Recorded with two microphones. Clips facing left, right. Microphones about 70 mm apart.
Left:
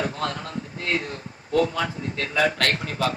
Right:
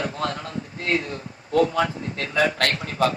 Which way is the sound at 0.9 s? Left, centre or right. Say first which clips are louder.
Right 2 dB; left.